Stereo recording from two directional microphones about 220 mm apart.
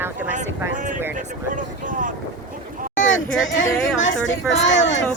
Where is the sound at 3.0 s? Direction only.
60° left (ahead or behind).